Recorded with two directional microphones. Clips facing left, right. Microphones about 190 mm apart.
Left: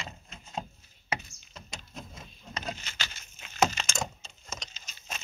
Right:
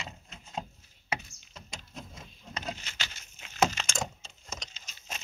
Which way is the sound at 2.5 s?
15° right (ahead or behind).